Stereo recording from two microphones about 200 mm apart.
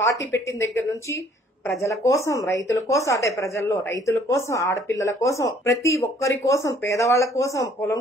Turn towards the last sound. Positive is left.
turn(degrees=15)  # may be behind; listen again after turning